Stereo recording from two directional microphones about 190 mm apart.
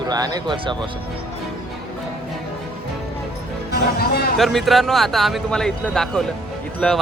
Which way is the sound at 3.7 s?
55° left (ahead or behind).